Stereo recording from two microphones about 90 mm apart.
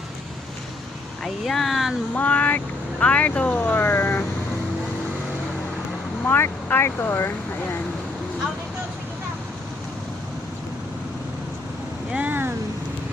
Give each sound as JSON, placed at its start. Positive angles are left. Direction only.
{"t": 1.2, "sound": "speech", "side_deg": 0}
{"t": 2.1, "sound": "speech", "side_deg": 15}
{"t": 6.2, "sound": "speech", "side_deg": 25}
{"t": 12.1, "sound": "vehicle", "side_deg": -20}